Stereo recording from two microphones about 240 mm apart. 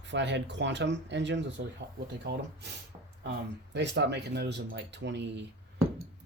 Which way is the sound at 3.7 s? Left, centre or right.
Right.